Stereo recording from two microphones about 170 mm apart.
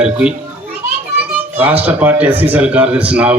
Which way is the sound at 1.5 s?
10° right (ahead or behind).